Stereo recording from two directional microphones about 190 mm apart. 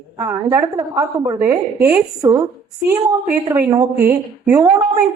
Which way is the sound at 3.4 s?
15° right (ahead or behind).